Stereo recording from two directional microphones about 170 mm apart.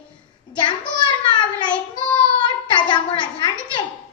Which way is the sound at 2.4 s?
25° left (ahead or behind).